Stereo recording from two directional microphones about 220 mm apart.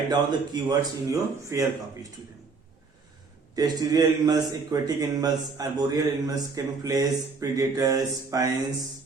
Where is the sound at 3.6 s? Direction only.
15° right (ahead or behind).